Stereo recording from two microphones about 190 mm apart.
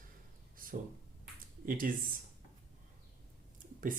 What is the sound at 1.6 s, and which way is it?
Speech, 45° right (ahead or behind).